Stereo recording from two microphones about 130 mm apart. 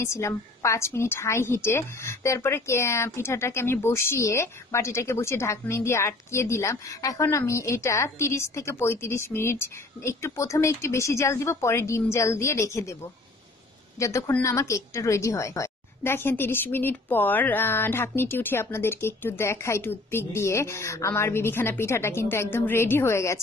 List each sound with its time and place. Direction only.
0.0 s a woman's voice: 20° left (ahead or behind)
13.9 s a woman's voice: 25° left (ahead or behind)